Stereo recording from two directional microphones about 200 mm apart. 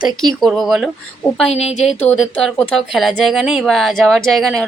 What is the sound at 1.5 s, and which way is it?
Speech, 30° left (ahead or behind).